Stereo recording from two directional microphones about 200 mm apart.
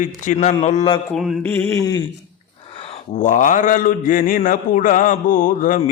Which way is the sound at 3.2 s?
40° left (ahead or behind).